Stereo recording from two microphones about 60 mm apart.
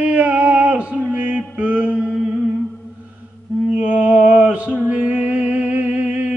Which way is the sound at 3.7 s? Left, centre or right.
Right.